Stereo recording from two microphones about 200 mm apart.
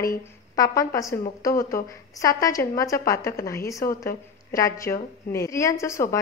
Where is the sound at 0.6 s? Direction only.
15° left (ahead or behind).